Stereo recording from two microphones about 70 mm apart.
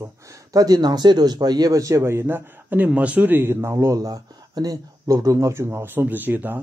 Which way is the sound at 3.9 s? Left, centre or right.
Right.